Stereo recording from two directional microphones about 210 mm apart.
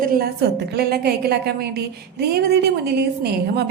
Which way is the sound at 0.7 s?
50° right (ahead or behind).